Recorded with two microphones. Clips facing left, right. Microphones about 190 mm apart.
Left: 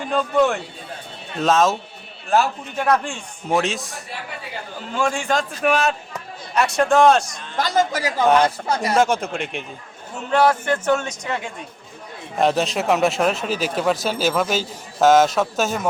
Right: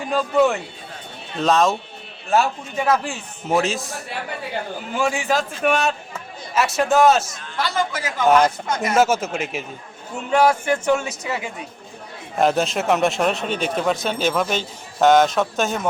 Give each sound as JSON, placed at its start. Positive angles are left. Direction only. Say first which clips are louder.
{"t": 0.1, "sound": "speech", "louder": "right 1 dB", "side_deg": 0}
{"t": 7.5, "sound": "a man's voice", "louder": "left 3 dB", "side_deg": 45}
{"t": 9.0, "sound": "speech", "louder": "right 3 dB", "side_deg": -5}